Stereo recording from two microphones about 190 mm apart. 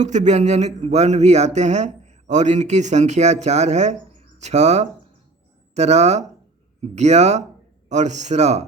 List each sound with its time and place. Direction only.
0.0 s speech: 40° right (ahead or behind)